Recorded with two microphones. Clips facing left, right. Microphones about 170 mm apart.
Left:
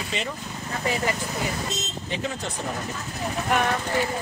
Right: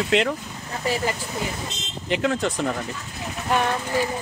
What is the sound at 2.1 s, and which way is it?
Speech, 80° right.